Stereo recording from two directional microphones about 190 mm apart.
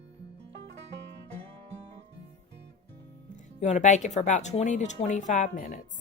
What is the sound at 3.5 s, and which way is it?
Speech, 40° left (ahead or behind).